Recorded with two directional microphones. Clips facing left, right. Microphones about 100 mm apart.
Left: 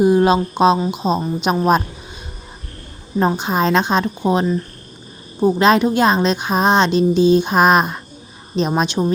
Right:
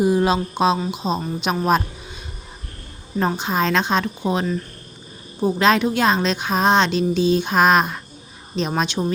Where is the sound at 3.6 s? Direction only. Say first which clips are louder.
Left 3 dB; 45° left (ahead or behind).